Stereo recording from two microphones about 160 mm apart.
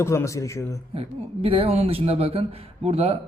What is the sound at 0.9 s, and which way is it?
A man's voice, 35° right (ahead or behind).